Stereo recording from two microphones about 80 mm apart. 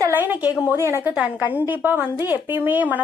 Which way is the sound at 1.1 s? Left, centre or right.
Right.